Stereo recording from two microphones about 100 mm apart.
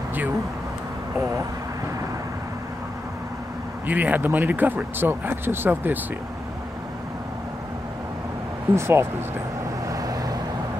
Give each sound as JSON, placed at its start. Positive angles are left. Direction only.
{"t": 3.8, "sound": "speech", "side_deg": -15}
{"t": 8.7, "sound": "speech", "side_deg": -25}
{"t": 9.8, "sound": "boat", "side_deg": -35}